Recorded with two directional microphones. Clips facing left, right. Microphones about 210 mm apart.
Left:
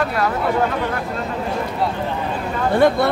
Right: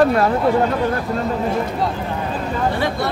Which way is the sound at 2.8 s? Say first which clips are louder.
Left 7 dB; 50° left (ahead or behind).